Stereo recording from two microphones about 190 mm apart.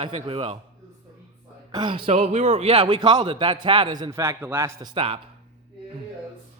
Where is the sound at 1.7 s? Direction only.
25° right (ahead or behind).